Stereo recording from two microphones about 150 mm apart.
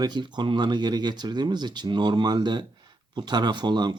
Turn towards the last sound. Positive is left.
turn(degrees=-30)  # may be behind; listen again after turning